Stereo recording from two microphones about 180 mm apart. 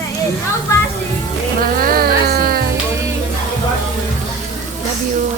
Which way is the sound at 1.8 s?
55° right (ahead or behind).